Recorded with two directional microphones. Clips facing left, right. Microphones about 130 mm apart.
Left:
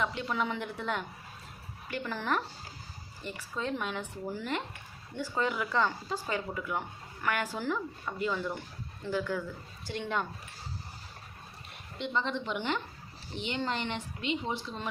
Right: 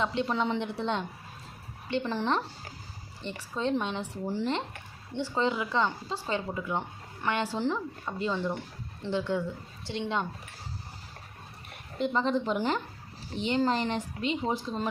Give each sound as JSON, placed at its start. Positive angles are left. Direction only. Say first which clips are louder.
{"t": 0.0, "sound": "speech", "louder": "right 4 dB", "side_deg": -30}
{"t": 11.9, "sound": "speech", "louder": "right 5 dB", "side_deg": -40}